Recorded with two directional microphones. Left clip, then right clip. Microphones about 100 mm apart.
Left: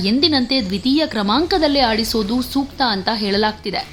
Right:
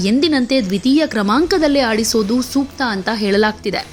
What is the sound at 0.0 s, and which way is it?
A woman's voice, 40° right (ahead or behind).